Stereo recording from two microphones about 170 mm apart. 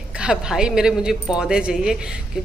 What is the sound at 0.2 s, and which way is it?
A woman's voice, 5° right (ahead or behind).